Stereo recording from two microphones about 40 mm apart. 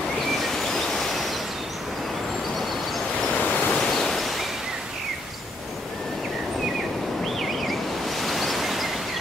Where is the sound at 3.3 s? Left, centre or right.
Left.